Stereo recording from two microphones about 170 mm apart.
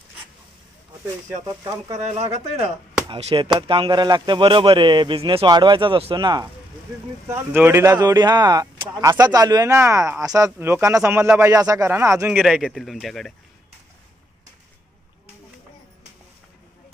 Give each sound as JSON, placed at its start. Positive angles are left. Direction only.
{"t": 1.9, "sound": "speech", "side_deg": -40}
{"t": 7.2, "sound": "speech", "side_deg": -15}
{"t": 12.4, "sound": "speech", "side_deg": 0}